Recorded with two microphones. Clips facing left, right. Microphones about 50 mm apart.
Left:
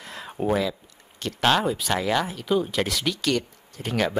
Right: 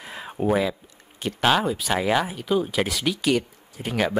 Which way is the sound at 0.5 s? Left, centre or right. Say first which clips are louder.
Right 2 dB; centre.